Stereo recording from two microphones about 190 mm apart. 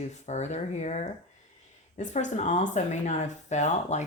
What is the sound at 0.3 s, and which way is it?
Speech, 35° left (ahead or behind).